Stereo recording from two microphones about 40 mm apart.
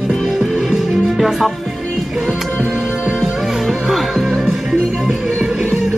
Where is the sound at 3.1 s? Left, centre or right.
Centre.